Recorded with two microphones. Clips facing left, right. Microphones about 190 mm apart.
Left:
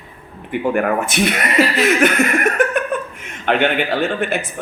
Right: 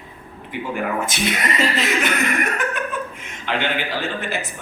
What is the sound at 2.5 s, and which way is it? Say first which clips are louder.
Laughter: left 8 dB; 55° left (ahead or behind).